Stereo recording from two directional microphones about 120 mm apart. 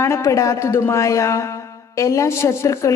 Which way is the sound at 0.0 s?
25° left (ahead or behind).